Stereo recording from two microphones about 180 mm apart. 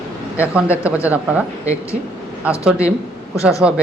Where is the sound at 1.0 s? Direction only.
10° right (ahead or behind).